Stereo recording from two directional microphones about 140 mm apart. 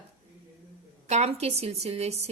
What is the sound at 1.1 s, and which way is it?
A woman's voice, 50° right (ahead or behind).